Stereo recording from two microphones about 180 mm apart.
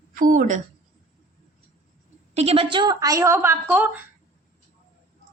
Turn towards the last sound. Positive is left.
turn(degrees=-10)  # may be behind; listen again after turning